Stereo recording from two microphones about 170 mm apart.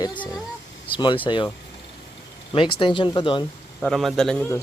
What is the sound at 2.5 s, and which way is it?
Speech, 30° left (ahead or behind).